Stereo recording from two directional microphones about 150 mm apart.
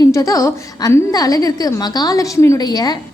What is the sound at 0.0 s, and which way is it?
A woman's voice, 20° left (ahead or behind).